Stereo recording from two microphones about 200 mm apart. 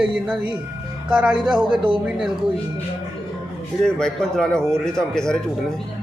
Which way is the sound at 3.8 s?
5° left (ahead or behind).